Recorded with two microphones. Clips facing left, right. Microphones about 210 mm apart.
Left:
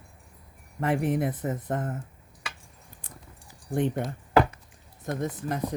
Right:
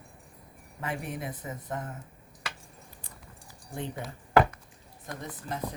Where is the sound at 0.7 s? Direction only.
60° left (ahead or behind).